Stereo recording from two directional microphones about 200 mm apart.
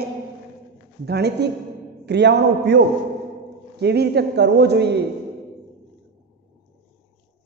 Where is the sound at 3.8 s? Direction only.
55° right (ahead or behind).